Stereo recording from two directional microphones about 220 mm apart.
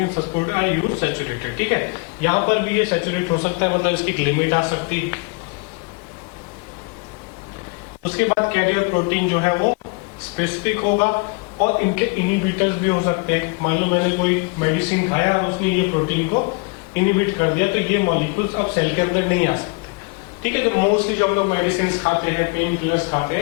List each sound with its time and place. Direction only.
0.0 s speech: 20° left (ahead or behind)
8.1 s speech: 15° left (ahead or behind)
12.5 s speech: 15° left (ahead or behind)
16.9 s speech: 15° left (ahead or behind)